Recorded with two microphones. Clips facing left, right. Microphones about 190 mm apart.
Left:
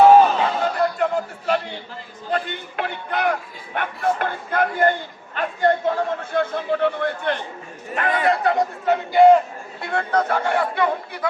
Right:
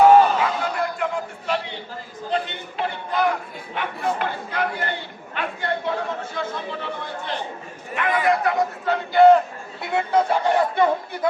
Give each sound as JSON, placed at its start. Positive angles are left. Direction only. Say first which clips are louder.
{"t": 0.3, "sound": "a sound", "louder": "left 2 dB", "side_deg": 35}
{"t": 2.3, "sound": "speech", "louder": "left 1 dB", "side_deg": 55}
{"t": 6.3, "sound": "speech", "louder": "left 7 dB", "side_deg": 55}
{"t": 7.9, "sound": "a man's voice", "louder": "even", "side_deg": 35}
{"t": 8.9, "sound": "speech", "louder": "left 1 dB", "side_deg": 10}
{"t": 9.8, "sound": "speech", "louder": "right 1 dB", "side_deg": -10}